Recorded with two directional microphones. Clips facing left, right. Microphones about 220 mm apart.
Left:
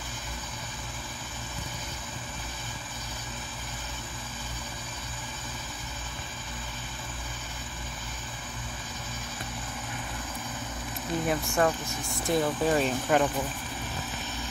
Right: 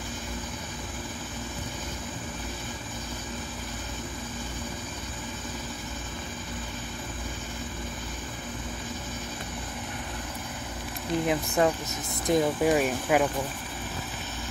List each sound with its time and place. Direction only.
11.2 s speech: 15° right (ahead or behind)